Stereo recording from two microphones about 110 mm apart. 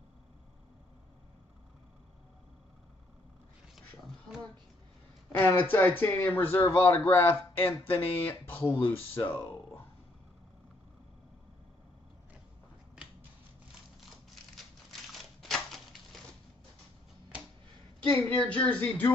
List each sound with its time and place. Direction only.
5.4 s speech: 20° left (ahead or behind)
14.9 s a sound: 5° left (ahead or behind)
18.0 s speech: 15° left (ahead or behind)